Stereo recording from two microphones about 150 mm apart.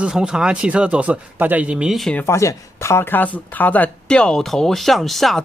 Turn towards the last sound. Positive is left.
turn(degrees=0)  # may be behind; listen again after turning